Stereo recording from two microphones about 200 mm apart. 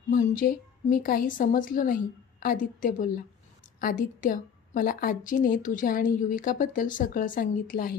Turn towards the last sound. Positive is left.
turn(degrees=45)  # may be behind; listen again after turning